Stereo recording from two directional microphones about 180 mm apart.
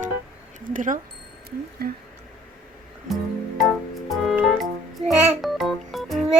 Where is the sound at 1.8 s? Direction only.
60° right (ahead or behind).